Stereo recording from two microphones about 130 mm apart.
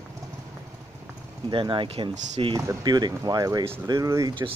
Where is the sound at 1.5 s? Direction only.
40° right (ahead or behind).